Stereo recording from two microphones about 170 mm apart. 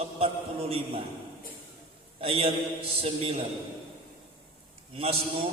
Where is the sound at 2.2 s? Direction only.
35° right (ahead or behind).